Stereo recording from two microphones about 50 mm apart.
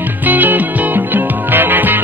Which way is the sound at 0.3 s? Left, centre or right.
Right.